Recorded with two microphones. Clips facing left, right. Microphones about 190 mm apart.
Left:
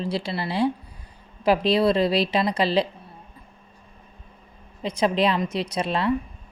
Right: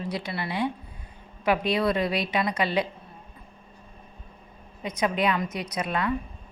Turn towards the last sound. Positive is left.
turn(degrees=30)  # may be behind; listen again after turning